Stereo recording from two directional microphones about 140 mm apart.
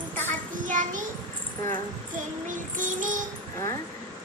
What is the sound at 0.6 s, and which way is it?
Child singing, 70° right (ahead or behind).